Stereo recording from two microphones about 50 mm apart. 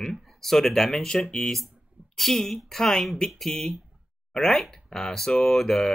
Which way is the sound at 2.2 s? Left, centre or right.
Centre.